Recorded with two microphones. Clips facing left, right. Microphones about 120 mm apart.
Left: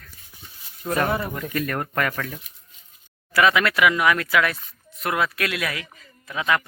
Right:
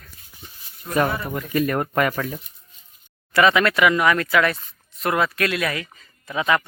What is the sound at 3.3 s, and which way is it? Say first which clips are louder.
Speech: right 2 dB; centre (ahead or behind).